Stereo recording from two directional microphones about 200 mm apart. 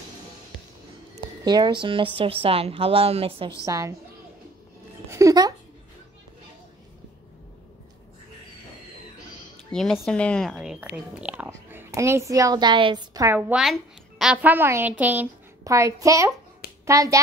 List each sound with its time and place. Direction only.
1.4 s a woman's voice: 20° right (ahead or behind)
3.6 s a woman's voice: 15° right (ahead or behind)
5.1 s a sound: 20° right (ahead or behind)
9.7 s a woman's voice: 5° left (ahead or behind); by 17.2 s 15° right (ahead or behind)